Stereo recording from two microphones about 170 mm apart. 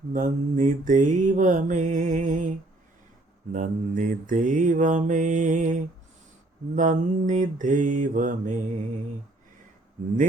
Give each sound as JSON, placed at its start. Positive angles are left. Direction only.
{"t": 0.1, "sound": "mantra", "side_deg": -50}
{"t": 3.5, "sound": "mantra", "side_deg": -50}